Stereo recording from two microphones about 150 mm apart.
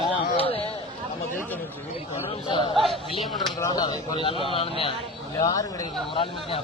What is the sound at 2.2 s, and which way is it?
Speech, 35° left (ahead or behind).